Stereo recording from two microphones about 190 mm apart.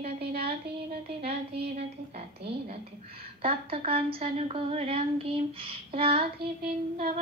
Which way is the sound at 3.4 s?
30° right (ahead or behind).